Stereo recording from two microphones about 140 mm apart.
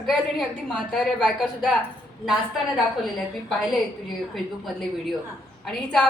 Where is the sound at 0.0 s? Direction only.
Centre (ahead or behind).